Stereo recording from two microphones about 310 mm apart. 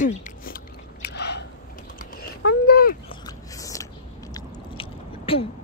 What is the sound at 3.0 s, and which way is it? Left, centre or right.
Biting, centre.